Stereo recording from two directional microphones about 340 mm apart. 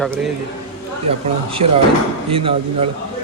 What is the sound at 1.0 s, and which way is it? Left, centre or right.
Speech, centre.